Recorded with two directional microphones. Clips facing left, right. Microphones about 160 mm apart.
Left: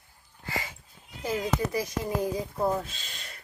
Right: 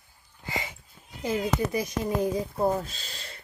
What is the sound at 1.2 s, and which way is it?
Speech, 20° right (ahead or behind).